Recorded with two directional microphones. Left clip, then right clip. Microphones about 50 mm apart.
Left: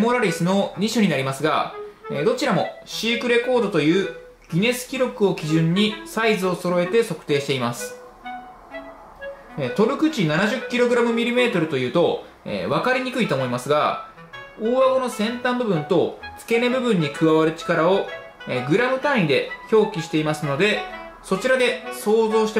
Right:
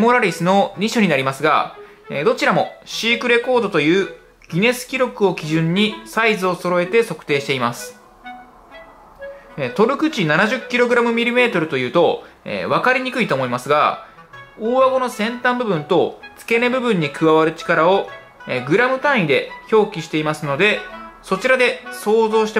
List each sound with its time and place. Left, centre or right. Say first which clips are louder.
0.0 s speech: right 5 dB; right
9.6 s speech: right 3 dB; right
15.0 s speech: right 3 dB; right